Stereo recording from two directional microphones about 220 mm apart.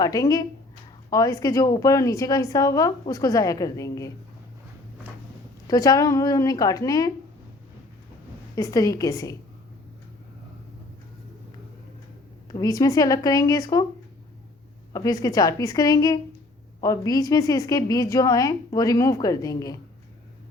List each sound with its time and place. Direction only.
0.0 s a woman's voice: 15° left (ahead or behind)
5.6 s a woman's voice: 15° left (ahead or behind)
8.5 s a woman's voice: 15° left (ahead or behind)
12.5 s a woman's voice: 15° left (ahead or behind)
14.9 s a woman's voice: 15° left (ahead or behind)